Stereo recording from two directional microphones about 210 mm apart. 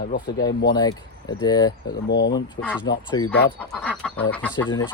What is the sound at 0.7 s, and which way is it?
Speech, 20° left (ahead or behind).